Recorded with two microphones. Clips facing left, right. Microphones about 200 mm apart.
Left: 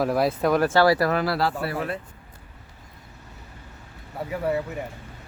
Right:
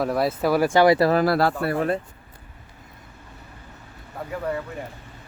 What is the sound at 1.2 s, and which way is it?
Speech, 50° right (ahead or behind).